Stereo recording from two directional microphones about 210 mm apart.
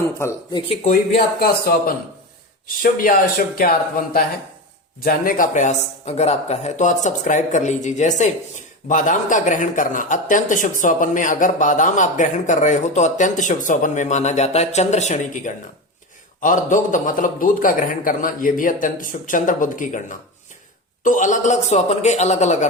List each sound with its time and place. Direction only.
0.2 s speech: 15° left (ahead or behind)
0.7 s a man's voice: 30° left (ahead or behind)
1.4 s speech: 45° left (ahead or behind)
4.9 s a man's voice: 40° left (ahead or behind)